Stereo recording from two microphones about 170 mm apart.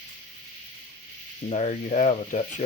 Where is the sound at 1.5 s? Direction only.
45° left (ahead or behind).